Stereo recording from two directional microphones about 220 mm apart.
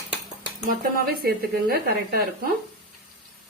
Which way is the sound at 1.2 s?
45° right (ahead or behind).